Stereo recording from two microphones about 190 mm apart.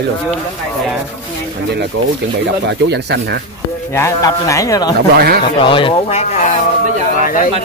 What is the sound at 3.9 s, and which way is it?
Speech, 15° left (ahead or behind).